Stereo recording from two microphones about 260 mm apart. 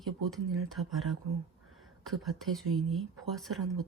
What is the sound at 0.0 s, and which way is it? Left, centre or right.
Speech, centre.